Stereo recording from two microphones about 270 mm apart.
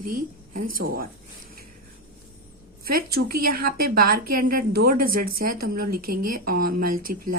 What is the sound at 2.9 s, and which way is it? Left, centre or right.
A woman's voice, right.